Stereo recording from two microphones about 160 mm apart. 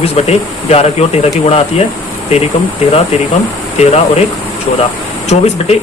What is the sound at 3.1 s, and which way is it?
Speech, 40° left (ahead or behind).